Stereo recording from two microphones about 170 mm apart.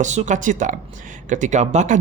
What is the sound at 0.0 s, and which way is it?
Speech, 45° right (ahead or behind).